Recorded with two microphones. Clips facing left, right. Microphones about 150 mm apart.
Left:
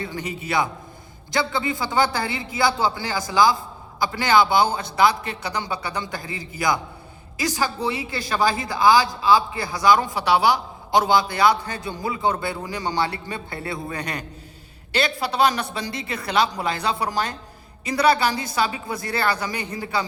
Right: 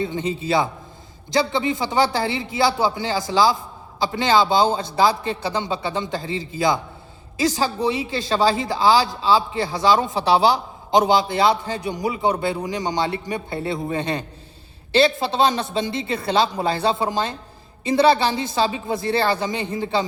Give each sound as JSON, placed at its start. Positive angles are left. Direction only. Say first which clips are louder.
{"t": 0.0, "sound": "speech", "louder": "right 6 dB", "side_deg": -25}